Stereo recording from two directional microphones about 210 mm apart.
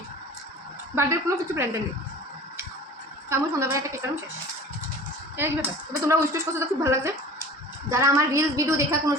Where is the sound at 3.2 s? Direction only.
15° right (ahead or behind).